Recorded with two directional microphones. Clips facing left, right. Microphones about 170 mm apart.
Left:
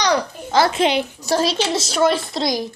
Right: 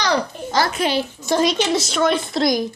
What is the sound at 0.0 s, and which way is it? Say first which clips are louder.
A child's voice: left 1 dB; 20° left (ahead or behind).